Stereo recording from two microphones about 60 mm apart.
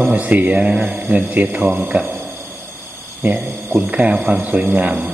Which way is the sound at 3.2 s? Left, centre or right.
Right.